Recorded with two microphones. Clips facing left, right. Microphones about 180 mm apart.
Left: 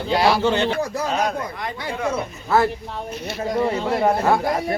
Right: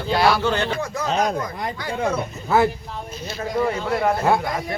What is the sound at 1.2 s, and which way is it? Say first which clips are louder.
Speech: right 1 dB; 35° right (ahead or behind).